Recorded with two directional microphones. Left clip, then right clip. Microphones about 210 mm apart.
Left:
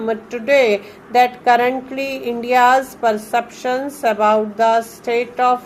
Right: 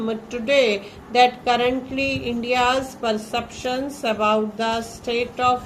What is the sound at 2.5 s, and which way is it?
A woman's voice, 20° left (ahead or behind).